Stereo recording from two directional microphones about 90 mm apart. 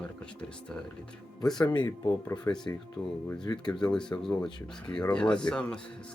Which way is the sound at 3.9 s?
10° left (ahead or behind).